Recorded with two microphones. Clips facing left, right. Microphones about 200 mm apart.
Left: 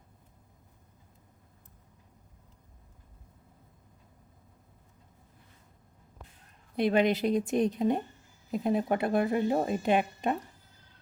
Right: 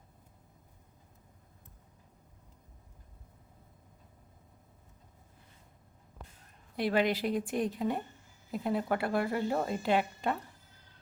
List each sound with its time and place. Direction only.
6.7 s a woman's voice: 20° left (ahead or behind)